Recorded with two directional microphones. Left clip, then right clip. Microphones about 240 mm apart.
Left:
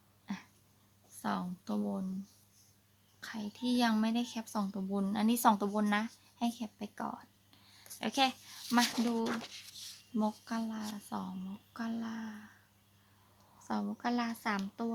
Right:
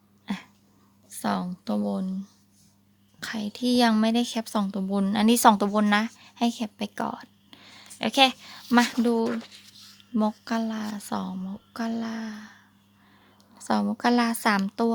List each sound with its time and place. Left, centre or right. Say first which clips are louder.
0.3 s a sound: right 10 dB; right
1.2 s speech: right 9 dB; right
3.2 s a woman's voice: right 11 dB; right
13.7 s speech: right 12 dB; right